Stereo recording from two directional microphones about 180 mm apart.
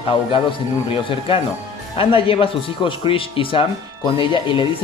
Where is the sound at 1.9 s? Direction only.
30° left (ahead or behind).